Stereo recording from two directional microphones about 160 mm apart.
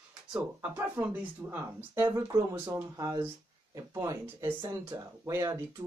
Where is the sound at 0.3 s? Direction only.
15° right (ahead or behind).